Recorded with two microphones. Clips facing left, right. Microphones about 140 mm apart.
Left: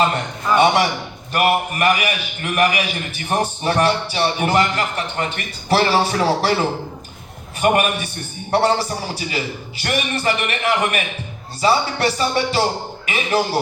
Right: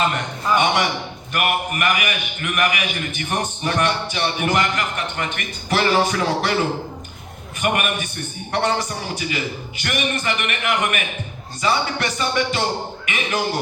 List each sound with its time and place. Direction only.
0.1 s a man's voice: 35° left (ahead or behind)
7.6 s a man's voice: 35° left (ahead or behind)